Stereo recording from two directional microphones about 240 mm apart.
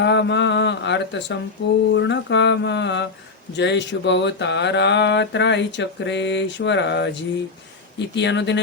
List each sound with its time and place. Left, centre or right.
0.0 s speech: left